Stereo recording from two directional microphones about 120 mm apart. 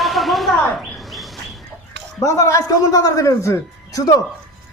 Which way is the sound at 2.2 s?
25° left (ahead or behind).